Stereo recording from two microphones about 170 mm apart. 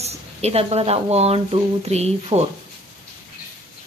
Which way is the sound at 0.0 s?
40° right (ahead or behind).